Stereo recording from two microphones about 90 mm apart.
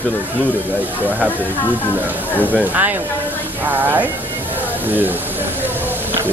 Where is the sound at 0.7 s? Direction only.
20° right (ahead or behind).